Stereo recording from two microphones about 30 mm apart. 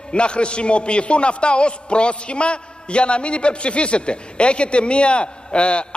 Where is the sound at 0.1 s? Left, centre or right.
Left.